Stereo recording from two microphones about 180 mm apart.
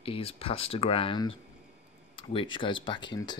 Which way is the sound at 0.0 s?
30° left (ahead or behind).